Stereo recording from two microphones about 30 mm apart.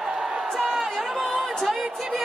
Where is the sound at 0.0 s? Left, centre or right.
Centre.